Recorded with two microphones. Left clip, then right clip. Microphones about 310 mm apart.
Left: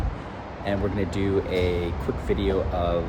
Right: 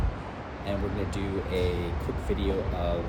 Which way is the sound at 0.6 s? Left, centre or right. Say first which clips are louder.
Left 6 dB; left.